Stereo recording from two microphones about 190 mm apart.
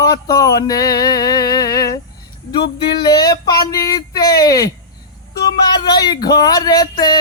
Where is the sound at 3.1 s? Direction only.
20° left (ahead or behind).